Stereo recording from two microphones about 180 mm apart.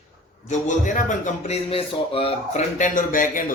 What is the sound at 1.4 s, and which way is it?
Speech, 35° left (ahead or behind).